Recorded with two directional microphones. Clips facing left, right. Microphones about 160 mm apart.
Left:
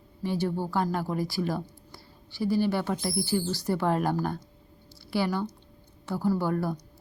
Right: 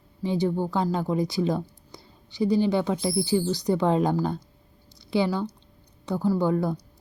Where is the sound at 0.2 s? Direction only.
15° right (ahead or behind).